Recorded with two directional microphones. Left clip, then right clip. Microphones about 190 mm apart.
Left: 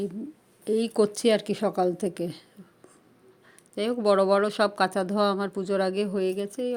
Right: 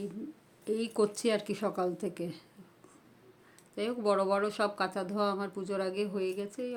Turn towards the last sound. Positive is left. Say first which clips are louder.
# left 7 dB
turn(degrees=35)  # may be behind; listen again after turning